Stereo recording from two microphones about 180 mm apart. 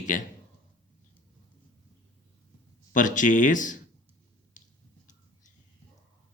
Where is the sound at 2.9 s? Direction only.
45° left (ahead or behind).